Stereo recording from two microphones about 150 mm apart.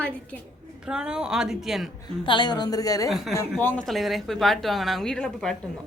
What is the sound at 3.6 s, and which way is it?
Speech, 10° left (ahead or behind).